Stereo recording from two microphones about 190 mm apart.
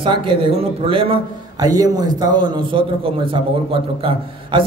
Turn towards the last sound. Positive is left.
turn(degrees=-30)  # may be behind; listen again after turning